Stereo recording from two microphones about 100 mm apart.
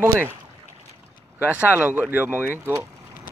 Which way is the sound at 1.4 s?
20° right (ahead or behind).